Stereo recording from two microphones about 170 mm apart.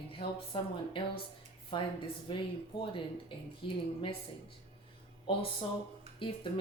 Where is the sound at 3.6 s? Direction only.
30° left (ahead or behind).